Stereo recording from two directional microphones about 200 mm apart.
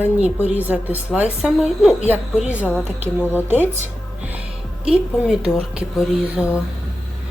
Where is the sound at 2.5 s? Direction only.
10° left (ahead or behind).